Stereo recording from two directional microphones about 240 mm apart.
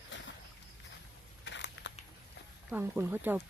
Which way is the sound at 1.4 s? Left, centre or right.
Left.